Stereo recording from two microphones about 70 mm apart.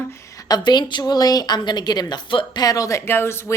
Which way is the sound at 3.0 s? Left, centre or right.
Left.